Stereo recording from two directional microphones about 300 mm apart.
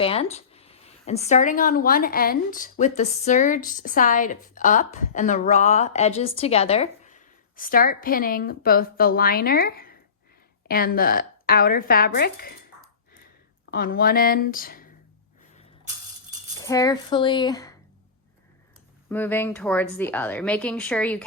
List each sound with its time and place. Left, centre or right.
0.0 s speech: centre
13.7 s speech: left
16.6 s speech: centre
19.0 s speech: centre